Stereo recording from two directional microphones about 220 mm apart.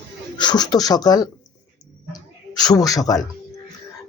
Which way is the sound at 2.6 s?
15° left (ahead or behind).